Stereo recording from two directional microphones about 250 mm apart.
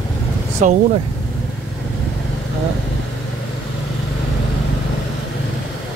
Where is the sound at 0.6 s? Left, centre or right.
Right.